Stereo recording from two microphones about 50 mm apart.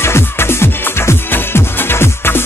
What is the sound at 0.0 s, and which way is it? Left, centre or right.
Music, left.